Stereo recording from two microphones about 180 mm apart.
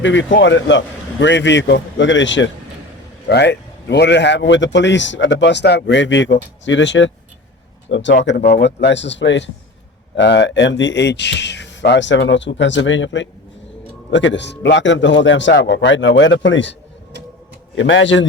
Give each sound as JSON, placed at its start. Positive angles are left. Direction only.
{"t": 0.0, "sound": "a man's voice", "side_deg": 90}
{"t": 3.2, "sound": "a man's voice", "side_deg": 70}
{"t": 8.2, "sound": "a man's voice", "side_deg": 70}
{"t": 17.7, "sound": "speech", "side_deg": 90}